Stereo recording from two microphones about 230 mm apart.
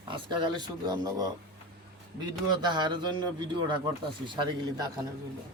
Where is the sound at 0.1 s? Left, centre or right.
Right.